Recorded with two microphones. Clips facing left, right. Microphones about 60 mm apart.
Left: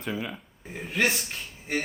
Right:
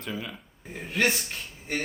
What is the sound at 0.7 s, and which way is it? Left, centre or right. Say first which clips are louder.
Speech: even; centre.